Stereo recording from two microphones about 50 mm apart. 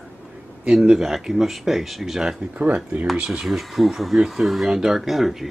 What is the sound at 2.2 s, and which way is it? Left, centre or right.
Speech, centre.